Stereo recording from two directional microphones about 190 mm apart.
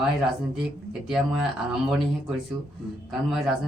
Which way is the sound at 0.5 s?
Centre (ahead or behind).